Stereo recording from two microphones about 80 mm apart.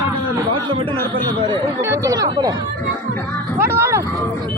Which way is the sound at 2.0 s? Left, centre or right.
Right.